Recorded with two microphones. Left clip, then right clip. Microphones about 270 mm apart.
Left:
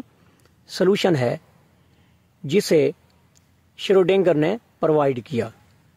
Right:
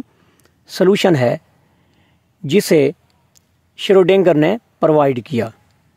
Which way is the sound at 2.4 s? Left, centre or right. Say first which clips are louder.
Right 5 dB; right.